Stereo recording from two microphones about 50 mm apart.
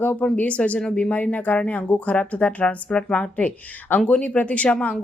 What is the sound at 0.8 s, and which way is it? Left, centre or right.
Speech, centre.